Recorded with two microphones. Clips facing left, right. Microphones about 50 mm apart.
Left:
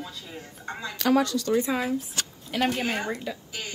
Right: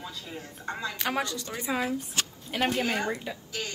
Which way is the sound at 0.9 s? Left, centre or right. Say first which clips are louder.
Left 10 dB; right.